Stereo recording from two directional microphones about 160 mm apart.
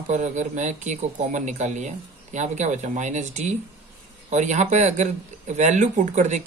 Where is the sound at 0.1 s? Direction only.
50° right (ahead or behind).